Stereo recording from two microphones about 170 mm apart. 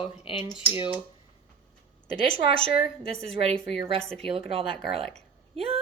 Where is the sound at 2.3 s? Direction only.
35° right (ahead or behind).